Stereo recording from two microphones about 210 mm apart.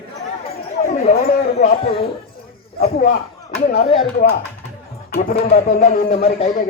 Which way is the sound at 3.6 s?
30° left (ahead or behind).